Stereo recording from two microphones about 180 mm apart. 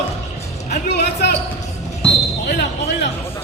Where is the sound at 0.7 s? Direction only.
70° left (ahead or behind).